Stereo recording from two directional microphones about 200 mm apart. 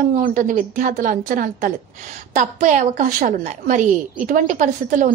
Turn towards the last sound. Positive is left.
turn(degrees=-40)  # may be behind; listen again after turning